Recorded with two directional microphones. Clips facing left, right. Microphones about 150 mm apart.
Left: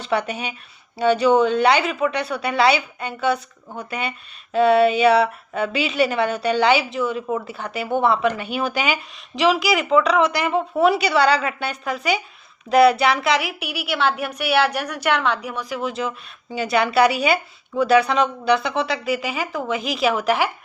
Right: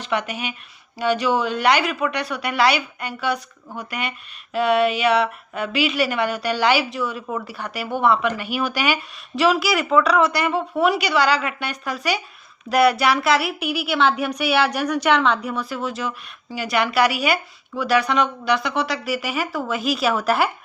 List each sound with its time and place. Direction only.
0.1 s speech: 30° left (ahead or behind)
13.6 s a woman's voice: 10° left (ahead or behind)
15.9 s speech: 25° left (ahead or behind)
18.6 s speech: 30° left (ahead or behind)